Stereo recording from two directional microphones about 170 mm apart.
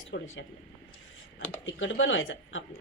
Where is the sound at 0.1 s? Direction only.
90° left.